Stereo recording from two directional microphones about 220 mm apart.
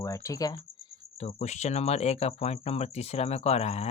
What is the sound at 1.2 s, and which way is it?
Speech, 30° left (ahead or behind).